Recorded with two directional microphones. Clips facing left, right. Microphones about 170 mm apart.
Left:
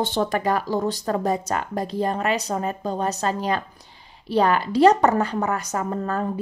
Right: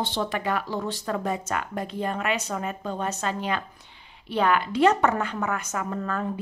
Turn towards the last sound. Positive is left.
turn(degrees=35)  # may be behind; listen again after turning